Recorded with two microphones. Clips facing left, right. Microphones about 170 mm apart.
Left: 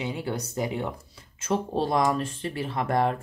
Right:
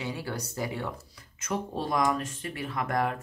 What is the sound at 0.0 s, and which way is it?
Speech, 20° left (ahead or behind).